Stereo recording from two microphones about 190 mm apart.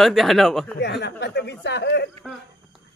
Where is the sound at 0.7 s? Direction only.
65° left (ahead or behind).